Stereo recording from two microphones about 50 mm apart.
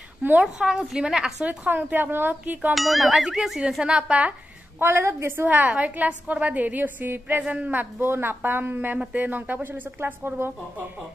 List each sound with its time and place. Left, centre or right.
0.7 s a woman's voice: centre
1.4 s a woman's voice: right
2.7 s speech: centre
3.8 s a woman's voice: right
4.7 s speech: right
5.5 s a woman's voice: right
7.4 s a woman's voice: right
8.1 s a woman's voice: right